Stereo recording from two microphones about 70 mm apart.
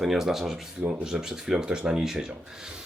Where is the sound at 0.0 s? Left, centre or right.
Centre.